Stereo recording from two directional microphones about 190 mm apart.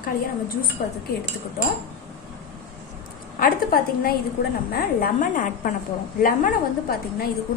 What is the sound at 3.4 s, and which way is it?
A woman's voice, 50° left (ahead or behind).